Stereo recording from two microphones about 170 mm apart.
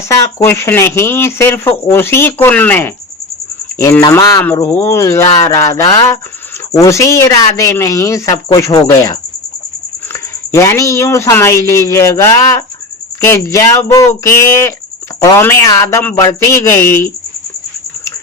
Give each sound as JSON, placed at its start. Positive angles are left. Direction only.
{"t": 0.1, "sound": "speech", "side_deg": 15}
{"t": 10.1, "sound": "speech", "side_deg": 15}